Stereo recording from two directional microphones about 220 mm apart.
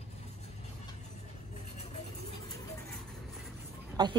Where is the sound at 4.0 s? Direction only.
20° right (ahead or behind).